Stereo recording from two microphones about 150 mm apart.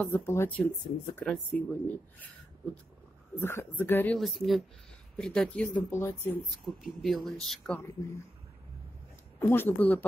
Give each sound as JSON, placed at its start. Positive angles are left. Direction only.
{"t": 0.0, "sound": "speech", "side_deg": 15}
{"t": 3.3, "sound": "speech", "side_deg": 20}
{"t": 4.2, "sound": "speech", "side_deg": 0}
{"t": 6.6, "sound": "speech", "side_deg": 0}
{"t": 7.8, "sound": "speech", "side_deg": 20}
{"t": 9.5, "sound": "speech", "side_deg": 15}